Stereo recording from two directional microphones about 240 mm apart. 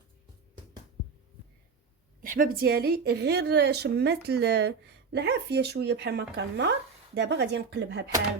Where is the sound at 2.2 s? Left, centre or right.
Right.